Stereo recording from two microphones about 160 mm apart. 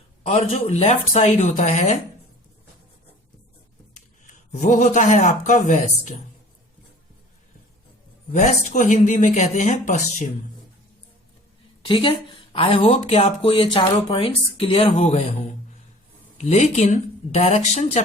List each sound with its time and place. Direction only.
0.2 s speech: 40° left (ahead or behind)
4.6 s speech: 50° left (ahead or behind)
8.3 s speech: 45° left (ahead or behind)
11.9 s speech: 30° left (ahead or behind)
16.4 s speech: 45° left (ahead or behind)